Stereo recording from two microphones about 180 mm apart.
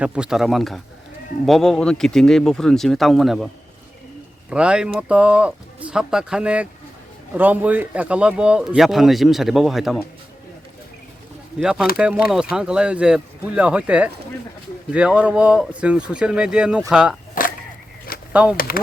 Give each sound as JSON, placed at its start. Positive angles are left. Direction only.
{"t": 0.0, "sound": "speech", "side_deg": -5}
{"t": 11.6, "sound": "speech", "side_deg": -5}
{"t": 17.4, "sound": "a sound", "side_deg": 50}
{"t": 18.7, "sound": "speech", "side_deg": 55}